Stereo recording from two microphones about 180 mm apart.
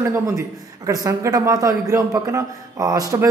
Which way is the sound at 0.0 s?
15° right (ahead or behind).